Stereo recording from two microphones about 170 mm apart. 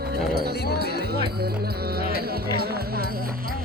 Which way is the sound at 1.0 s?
70° right (ahead or behind).